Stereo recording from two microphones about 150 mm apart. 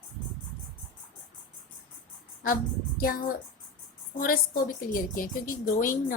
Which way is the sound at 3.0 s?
80° left.